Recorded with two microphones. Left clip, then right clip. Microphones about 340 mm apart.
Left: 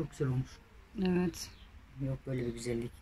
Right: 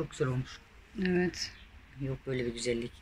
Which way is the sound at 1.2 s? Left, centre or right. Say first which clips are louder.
Right 4 dB; centre.